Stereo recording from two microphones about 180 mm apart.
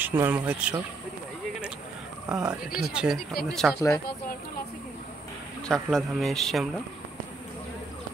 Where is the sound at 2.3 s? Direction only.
5° right (ahead or behind).